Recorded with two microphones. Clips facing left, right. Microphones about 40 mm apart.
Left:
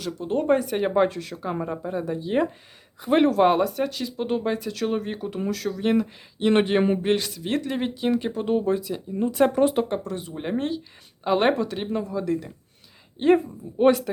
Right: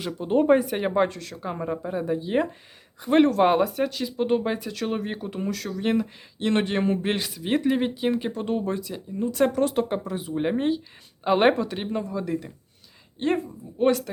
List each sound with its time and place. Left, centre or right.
0.0 s speech: centre
6.5 s speech: centre
7.0 s speech: centre
8.3 s speech: centre
9.3 s speech: centre
9.9 s speech: centre
13.3 s speech: centre